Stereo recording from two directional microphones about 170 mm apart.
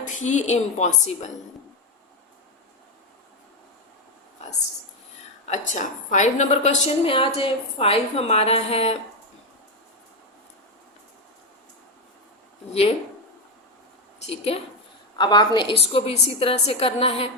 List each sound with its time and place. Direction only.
0.0 s a woman's voice: 45° left (ahead or behind)
5.5 s a woman's voice: 45° left (ahead or behind)
12.7 s a woman's voice: 35° left (ahead or behind)
14.3 s a woman's voice: 35° left (ahead or behind)